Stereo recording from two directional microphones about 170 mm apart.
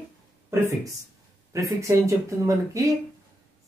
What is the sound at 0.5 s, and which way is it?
Speech, 15° right (ahead or behind).